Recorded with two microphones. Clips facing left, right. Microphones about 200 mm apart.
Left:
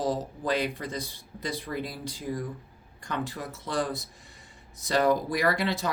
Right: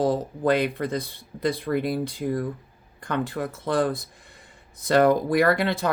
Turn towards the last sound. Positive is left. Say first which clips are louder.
# right 6 dB
turn(degrees=-55)  # may be behind; listen again after turning